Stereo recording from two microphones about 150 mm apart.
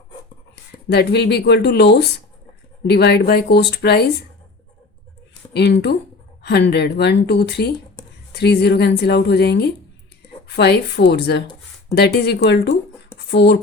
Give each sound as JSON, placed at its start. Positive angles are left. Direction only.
{"t": 0.9, "sound": "speech", "side_deg": 90}
{"t": 5.3, "sound": "speech", "side_deg": 90}
{"t": 13.1, "sound": "a sound", "side_deg": 15}